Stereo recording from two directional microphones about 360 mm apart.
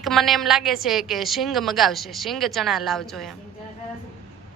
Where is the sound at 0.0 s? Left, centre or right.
Centre.